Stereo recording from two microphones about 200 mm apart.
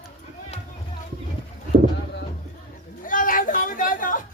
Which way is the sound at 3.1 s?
40° left (ahead or behind).